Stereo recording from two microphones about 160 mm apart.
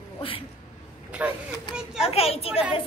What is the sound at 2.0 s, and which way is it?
Speech, 40° left (ahead or behind).